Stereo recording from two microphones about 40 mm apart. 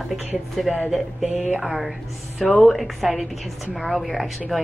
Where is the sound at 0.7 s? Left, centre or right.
Centre.